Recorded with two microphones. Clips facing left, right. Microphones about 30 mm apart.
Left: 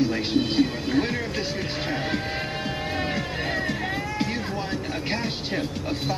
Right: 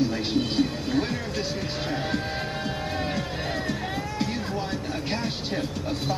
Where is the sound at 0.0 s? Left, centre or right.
Centre.